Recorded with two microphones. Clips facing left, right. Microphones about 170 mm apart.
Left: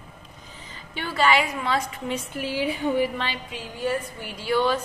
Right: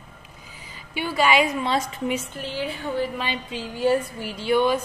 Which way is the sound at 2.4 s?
10° left (ahead or behind).